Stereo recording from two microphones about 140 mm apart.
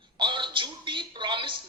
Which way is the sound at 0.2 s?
35° right (ahead or behind).